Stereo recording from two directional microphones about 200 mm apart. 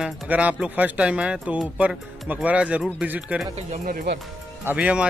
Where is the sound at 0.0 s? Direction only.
5° right (ahead or behind).